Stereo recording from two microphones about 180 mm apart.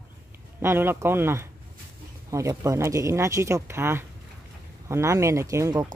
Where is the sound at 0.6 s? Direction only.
10° right (ahead or behind).